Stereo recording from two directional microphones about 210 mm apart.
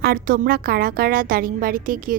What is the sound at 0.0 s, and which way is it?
A woman's voice, 45° right (ahead or behind).